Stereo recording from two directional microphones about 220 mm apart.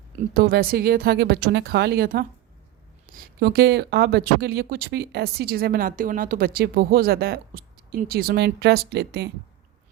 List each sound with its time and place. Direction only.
0.3 s speech: 45° right (ahead or behind)